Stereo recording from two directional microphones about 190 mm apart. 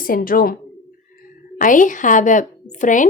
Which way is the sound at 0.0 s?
50° left (ahead or behind).